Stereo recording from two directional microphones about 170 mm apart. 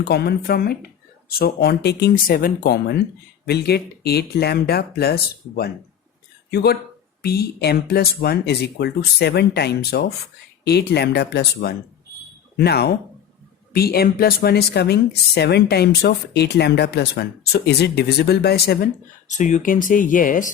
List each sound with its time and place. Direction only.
0.0 s a woman's voice: 70° left (ahead or behind)
19.3 s speech: 45° left (ahead or behind)